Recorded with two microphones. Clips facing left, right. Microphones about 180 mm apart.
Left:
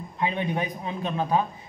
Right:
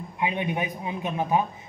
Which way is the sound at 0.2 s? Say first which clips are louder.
Even; 15° right (ahead or behind).